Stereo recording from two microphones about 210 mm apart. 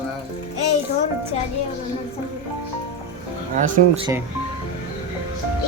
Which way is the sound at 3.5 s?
40° right (ahead or behind).